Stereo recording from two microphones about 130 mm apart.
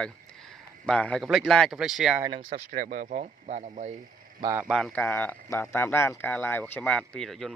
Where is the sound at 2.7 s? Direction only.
85° right; by 3.9 s 60° right (ahead or behind).